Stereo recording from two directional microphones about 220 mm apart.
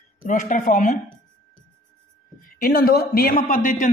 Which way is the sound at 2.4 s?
45° left (ahead or behind).